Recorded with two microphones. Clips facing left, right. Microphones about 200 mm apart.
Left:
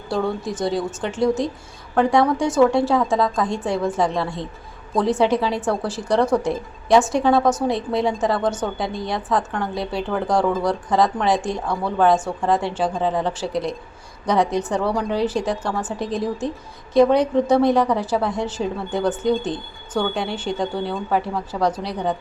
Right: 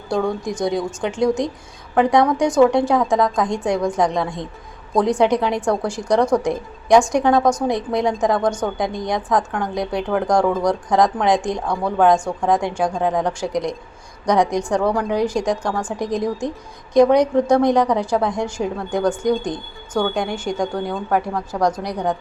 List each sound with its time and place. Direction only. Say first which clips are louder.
0.6 s a woman's voice: right 2 dB; 15° right (ahead or behind)